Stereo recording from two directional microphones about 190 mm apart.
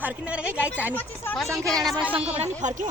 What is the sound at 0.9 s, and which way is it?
Speech, 10° left (ahead or behind).